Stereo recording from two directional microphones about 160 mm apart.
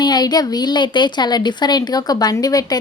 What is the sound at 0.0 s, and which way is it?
A woman's voice, 25° left (ahead or behind).